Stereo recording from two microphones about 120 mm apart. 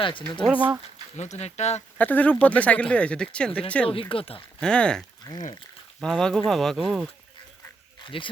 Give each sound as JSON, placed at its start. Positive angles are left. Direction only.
{"t": 0.0, "sound": "speech", "side_deg": 45}
{"t": 0.5, "sound": "speech", "side_deg": -10}
{"t": 1.1, "sound": "speech", "side_deg": 70}
{"t": 2.0, "sound": "speech", "side_deg": 15}
{"t": 3.8, "sound": "speech", "side_deg": 50}
{"t": 4.6, "sound": "speech", "side_deg": 10}
{"t": 5.3, "sound": "speech", "side_deg": 30}
{"t": 6.0, "sound": "speech", "side_deg": 5}
{"t": 8.0, "sound": "speech", "side_deg": 45}